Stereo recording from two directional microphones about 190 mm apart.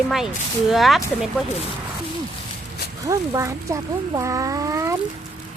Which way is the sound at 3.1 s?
15° right (ahead or behind).